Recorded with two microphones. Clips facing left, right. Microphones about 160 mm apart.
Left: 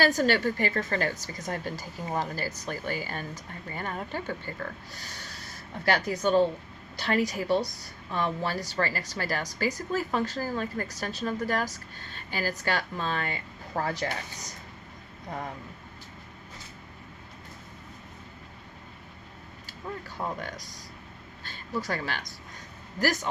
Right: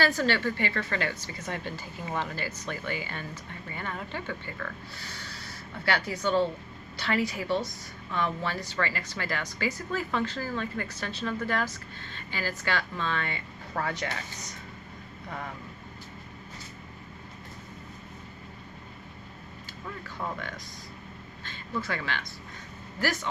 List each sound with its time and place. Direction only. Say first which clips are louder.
0.0 s a woman's voice: left 2 dB; 40° left (ahead or behind)
20.4 s a woman's voice: left 1 dB; 40° left (ahead or behind)